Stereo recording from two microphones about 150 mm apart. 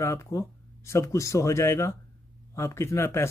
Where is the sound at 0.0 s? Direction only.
20° left (ahead or behind).